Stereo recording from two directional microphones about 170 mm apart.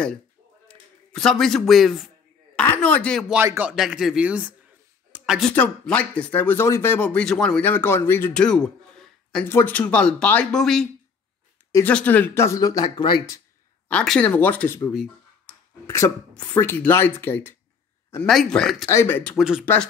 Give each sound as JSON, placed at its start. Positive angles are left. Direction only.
{"t": 0.7, "sound": "a sound", "side_deg": 5}
{"t": 2.7, "sound": "speech", "side_deg": 10}
{"t": 5.1, "sound": "a sound", "side_deg": -5}
{"t": 5.5, "sound": "speech", "side_deg": 10}
{"t": 13.8, "sound": "speech", "side_deg": 5}
{"t": 16.5, "sound": "speech", "side_deg": 10}
{"t": 18.9, "sound": "speech", "side_deg": 15}
{"t": 19.3, "sound": "speech", "side_deg": -5}
{"t": 19.6, "sound": "speech", "side_deg": 10}